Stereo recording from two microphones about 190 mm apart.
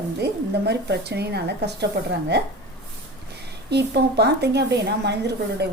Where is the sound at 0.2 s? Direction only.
60° right (ahead or behind).